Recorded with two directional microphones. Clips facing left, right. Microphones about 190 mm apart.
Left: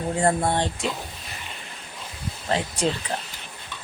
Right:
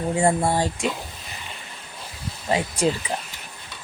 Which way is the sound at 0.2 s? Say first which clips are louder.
Right 1 dB; 10° right (ahead or behind).